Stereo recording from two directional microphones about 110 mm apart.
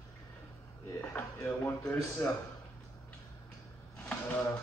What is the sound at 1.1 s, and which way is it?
Speech, 15° left (ahead or behind).